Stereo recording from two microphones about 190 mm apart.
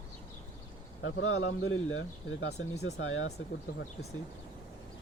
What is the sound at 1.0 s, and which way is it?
A man's voice, 90° left.